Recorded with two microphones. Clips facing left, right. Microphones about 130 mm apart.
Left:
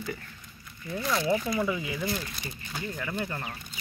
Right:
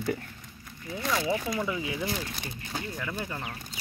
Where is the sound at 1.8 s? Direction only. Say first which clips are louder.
Even; 15° right (ahead or behind).